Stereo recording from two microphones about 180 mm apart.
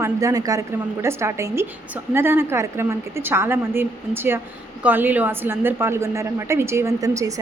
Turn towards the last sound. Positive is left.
turn(degrees=-20)  # may be behind; listen again after turning